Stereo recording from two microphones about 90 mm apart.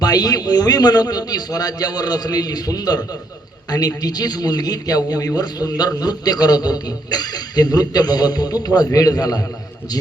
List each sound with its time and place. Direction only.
0.0 s a man's voice: 45° left (ahead or behind)